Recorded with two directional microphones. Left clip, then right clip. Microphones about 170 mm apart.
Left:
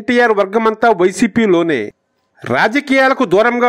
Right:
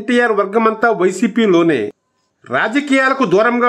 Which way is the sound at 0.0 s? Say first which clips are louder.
Left 2 dB; 40° left (ahead or behind).